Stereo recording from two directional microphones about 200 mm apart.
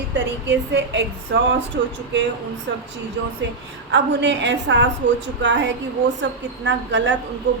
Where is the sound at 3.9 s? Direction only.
60° right (ahead or behind).